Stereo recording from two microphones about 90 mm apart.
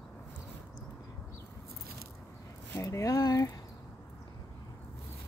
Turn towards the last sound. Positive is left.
turn(degrees=35)  # may be behind; listen again after turning